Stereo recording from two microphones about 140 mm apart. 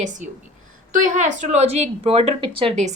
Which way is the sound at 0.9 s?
65° right (ahead or behind).